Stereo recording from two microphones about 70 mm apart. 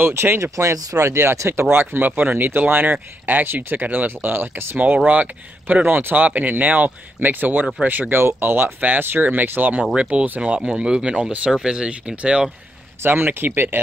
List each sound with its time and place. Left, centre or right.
0.1 s speech: right
0.7 s speech: right
1.0 s speech: right; by 12.4 s centre
13.0 s speech: right